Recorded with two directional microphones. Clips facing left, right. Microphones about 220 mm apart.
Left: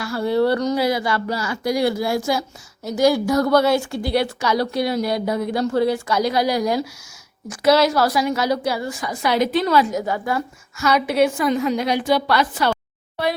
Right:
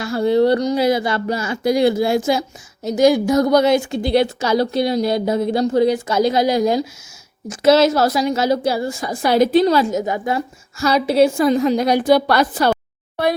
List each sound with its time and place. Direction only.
0.0 s a woman's voice: 20° right (ahead or behind)
10.8 s a woman's voice: 35° right (ahead or behind)